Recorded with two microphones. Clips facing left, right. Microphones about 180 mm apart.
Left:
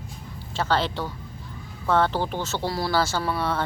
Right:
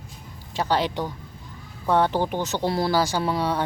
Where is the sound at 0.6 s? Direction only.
15° right (ahead or behind).